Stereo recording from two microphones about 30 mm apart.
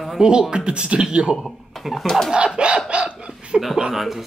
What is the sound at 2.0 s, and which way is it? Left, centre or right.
Speech, centre.